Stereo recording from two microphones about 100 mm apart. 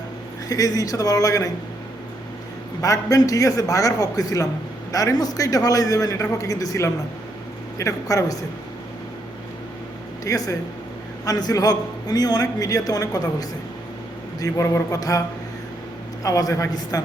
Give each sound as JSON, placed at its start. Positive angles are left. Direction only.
{"t": 0.4, "sound": "a man's voice", "side_deg": 40}
{"t": 2.8, "sound": "a man's voice", "side_deg": 35}
{"t": 10.2, "sound": "a man's voice", "side_deg": 35}
{"t": 14.4, "sound": "a man's voice", "side_deg": 35}
{"t": 16.2, "sound": "a man's voice", "side_deg": 35}